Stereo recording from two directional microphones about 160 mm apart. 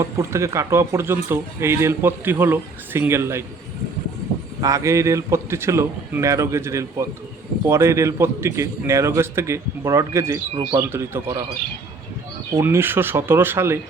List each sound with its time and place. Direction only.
0.0 s speech: 20° right (ahead or behind)
4.6 s a man's voice: 20° right (ahead or behind)
10.8 s speech: 15° right (ahead or behind)
12.5 s speech: 15° right (ahead or behind)